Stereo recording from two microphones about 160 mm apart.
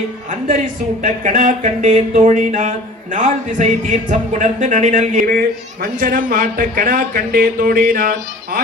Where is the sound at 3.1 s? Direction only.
50° right (ahead or behind).